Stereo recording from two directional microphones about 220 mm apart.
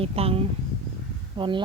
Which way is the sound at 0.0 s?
25° right (ahead or behind).